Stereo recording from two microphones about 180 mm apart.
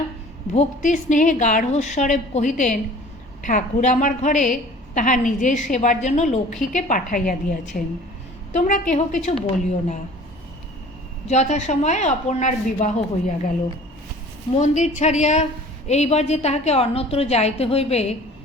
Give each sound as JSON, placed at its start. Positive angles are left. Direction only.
{"t": 0.5, "sound": "a woman's voice", "side_deg": 45}
{"t": 8.5, "sound": "a woman's voice", "side_deg": 45}
{"t": 11.3, "sound": "speech", "side_deg": 40}
{"t": 14.8, "sound": "speech", "side_deg": 40}